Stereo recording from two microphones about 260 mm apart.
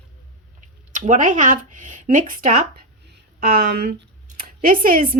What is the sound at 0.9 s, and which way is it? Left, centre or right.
A woman's voice, right.